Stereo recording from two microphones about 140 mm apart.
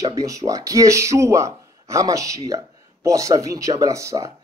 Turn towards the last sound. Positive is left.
turn(degrees=-20)  # may be behind; listen again after turning